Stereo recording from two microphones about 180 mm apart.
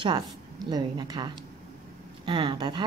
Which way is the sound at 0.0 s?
25° right (ahead or behind).